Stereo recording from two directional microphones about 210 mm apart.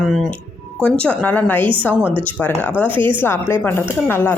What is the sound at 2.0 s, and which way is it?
Speech, 25° right (ahead or behind).